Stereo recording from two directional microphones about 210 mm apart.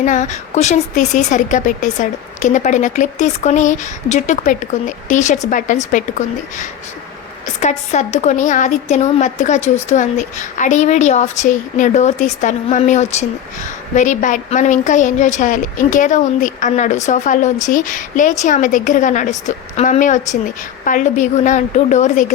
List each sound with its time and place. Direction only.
0.0 s a woman's voice: 35° left (ahead or behind)